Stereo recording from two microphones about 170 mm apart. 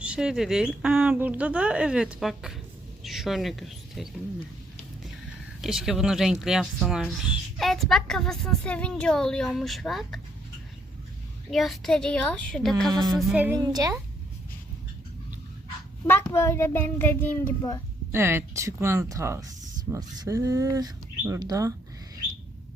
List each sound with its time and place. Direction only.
0.0 s a woman's voice: 5° right (ahead or behind)
5.6 s speech: centre (ahead or behind)
11.5 s speech: centre (ahead or behind)
12.9 s speech: 25° right (ahead or behind)
13.1 s a woman's voice: 10° right (ahead or behind)
13.6 s speech: 20° right (ahead or behind)
16.0 s a child's voice: 15° left (ahead or behind)
18.1 s speech: 15° right (ahead or behind)